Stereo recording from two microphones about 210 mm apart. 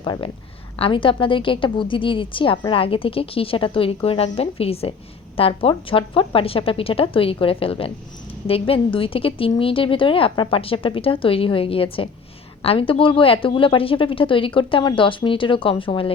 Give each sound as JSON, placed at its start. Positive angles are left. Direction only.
{"t": 0.0, "sound": "a woman's voice", "side_deg": 20}